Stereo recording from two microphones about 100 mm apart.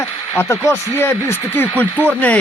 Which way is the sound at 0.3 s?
30° left (ahead or behind).